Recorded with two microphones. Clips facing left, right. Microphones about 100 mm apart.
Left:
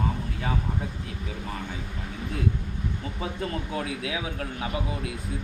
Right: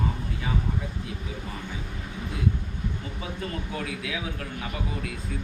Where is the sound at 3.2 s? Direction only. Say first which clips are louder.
Left 3 dB; 30° left (ahead or behind).